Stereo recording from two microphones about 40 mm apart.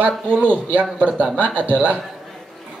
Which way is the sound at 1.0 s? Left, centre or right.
Right.